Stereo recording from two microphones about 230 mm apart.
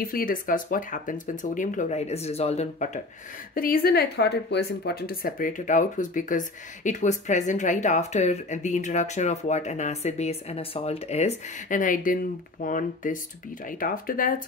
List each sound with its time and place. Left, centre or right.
0.0 s speech: left